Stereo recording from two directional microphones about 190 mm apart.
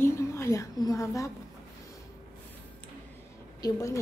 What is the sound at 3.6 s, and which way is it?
Speech, 15° left (ahead or behind).